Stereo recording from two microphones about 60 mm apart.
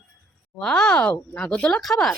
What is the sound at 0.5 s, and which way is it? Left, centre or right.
Speech, centre.